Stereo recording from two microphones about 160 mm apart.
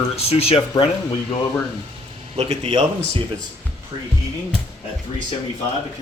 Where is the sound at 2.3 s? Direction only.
35° right (ahead or behind).